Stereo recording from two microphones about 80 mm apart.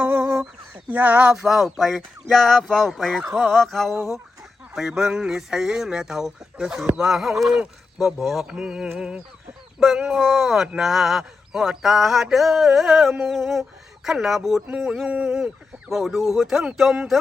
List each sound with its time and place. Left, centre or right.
0.0 s chicken: right
0.9 s speech: centre